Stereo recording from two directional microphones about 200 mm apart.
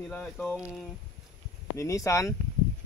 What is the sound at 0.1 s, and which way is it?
Speech, 5° left (ahead or behind).